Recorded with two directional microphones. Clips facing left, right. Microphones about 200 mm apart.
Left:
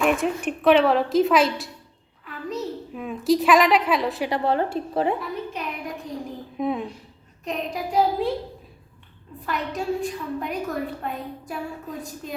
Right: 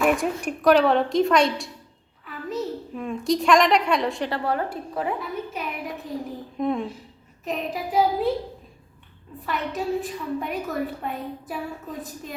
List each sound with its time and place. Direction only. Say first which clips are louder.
0.0 s a woman's voice: even; centre (ahead or behind)
4.3 s a woman's voice: left 3 dB; 25° left (ahead or behind)
5.2 s a sound: even; 5° right (ahead or behind)
7.4 s a woman's voice: even; centre (ahead or behind)
9.5 s a woman's voice: even; centre (ahead or behind)